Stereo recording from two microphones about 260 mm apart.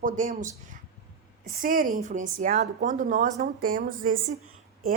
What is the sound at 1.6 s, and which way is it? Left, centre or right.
A woman's voice, right.